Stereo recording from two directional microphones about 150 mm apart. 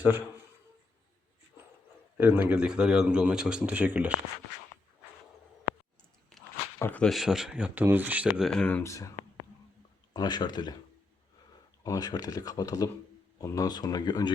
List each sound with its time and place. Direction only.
2.1 s speech: 15° right (ahead or behind)
5.7 s busy signal: 20° left (ahead or behind)
6.3 s a sound: centre (ahead or behind)
6.7 s speech: 10° left (ahead or behind); by 8.3 s 10° right (ahead or behind)
8.4 s speech: 5° left (ahead or behind); by 9.0 s 20° left (ahead or behind)
10.1 s speech: 30° left (ahead or behind)
11.8 s speech: 25° left (ahead or behind)